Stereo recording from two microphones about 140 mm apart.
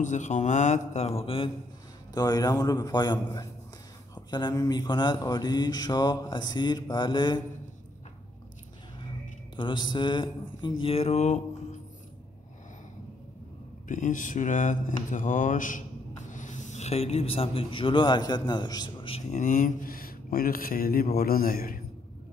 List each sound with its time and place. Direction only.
0.0 s speech: 60° left (ahead or behind); by 1.5 s 40° left (ahead or behind)
2.1 s speech: 25° left (ahead or behind)
9.6 s mantra: 35° left (ahead or behind); by 11.4 s 55° left (ahead or behind)
13.8 s speech: 70° left (ahead or behind); by 19.2 s 40° left (ahead or behind)
19.3 s speech: 65° left (ahead or behind); by 21.7 s 90° left